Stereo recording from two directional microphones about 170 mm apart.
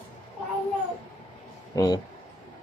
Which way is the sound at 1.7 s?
25° left (ahead or behind).